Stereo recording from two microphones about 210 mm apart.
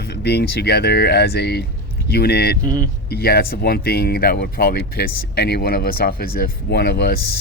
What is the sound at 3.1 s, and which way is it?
Speech, 50° left (ahead or behind).